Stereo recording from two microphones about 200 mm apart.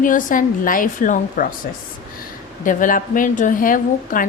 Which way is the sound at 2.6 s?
40° left (ahead or behind).